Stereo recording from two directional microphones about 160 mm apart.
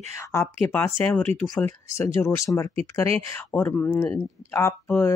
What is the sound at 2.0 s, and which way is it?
Speech, 20° left (ahead or behind).